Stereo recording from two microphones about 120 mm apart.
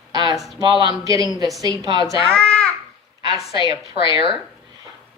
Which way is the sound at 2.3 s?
10° left (ahead or behind).